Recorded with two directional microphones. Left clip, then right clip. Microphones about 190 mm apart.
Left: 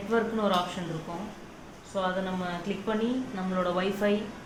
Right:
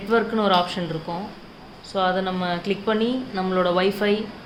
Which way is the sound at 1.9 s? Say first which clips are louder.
Right 8 dB; 65° right (ahead or behind).